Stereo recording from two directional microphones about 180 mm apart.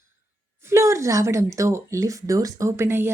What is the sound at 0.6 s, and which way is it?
Speech, 15° right (ahead or behind).